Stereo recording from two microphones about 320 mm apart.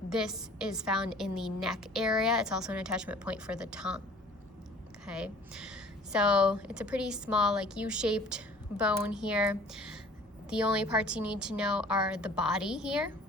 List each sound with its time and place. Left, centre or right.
0.1 s a woman's voice: centre
5.0 s a woman's voice: centre